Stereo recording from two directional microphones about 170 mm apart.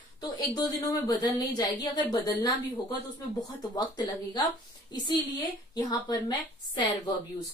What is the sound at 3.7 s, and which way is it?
Speech, 25° left (ahead or behind).